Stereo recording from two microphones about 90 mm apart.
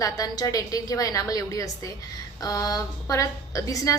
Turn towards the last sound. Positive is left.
turn(degrees=35)  # may be behind; listen again after turning